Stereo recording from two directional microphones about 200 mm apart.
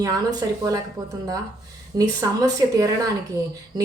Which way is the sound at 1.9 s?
15° right (ahead or behind).